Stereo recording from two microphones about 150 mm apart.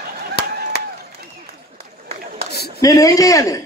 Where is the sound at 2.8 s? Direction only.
25° left (ahead or behind).